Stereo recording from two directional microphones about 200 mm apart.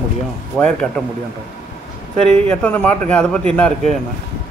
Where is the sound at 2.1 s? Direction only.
5° left (ahead or behind).